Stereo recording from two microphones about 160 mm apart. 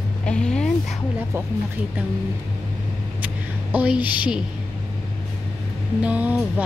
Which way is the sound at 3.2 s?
10° right (ahead or behind).